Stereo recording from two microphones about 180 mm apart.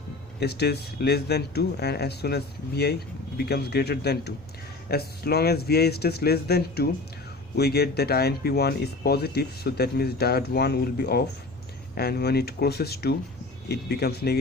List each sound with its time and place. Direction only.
0.3 s speech: 65° left (ahead or behind)